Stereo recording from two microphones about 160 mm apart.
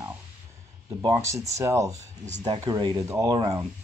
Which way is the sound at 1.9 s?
45° right (ahead or behind).